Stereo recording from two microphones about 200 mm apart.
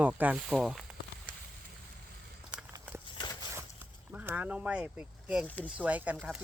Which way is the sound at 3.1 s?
20° left (ahead or behind).